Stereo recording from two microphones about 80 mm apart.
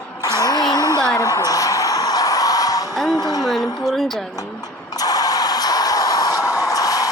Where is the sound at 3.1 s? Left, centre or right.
Left.